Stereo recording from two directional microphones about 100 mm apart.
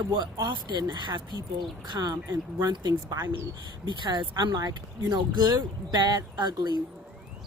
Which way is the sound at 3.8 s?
50° right (ahead or behind).